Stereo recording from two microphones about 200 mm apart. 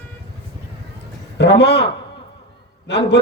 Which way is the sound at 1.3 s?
60° left (ahead or behind).